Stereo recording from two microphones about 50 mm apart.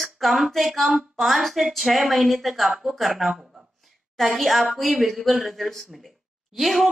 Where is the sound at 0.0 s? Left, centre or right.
Centre.